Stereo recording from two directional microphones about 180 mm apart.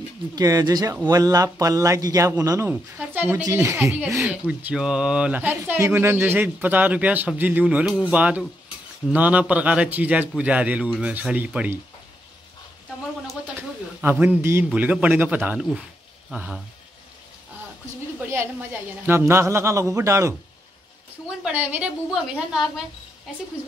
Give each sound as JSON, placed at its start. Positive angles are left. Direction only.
{"t": 0.4, "sound": "a man's voice", "side_deg": -20}
{"t": 14.2, "sound": "speech", "side_deg": -10}
{"t": 19.0, "sound": "speech", "side_deg": -15}
{"t": 21.4, "sound": "speech", "side_deg": -10}